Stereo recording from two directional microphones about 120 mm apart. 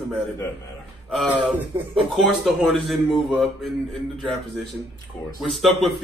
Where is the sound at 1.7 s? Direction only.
25° right (ahead or behind).